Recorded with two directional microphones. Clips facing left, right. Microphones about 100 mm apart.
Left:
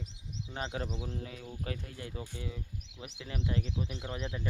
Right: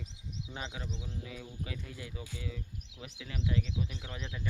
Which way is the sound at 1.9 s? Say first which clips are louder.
Left 2 dB; 30° left (ahead or behind).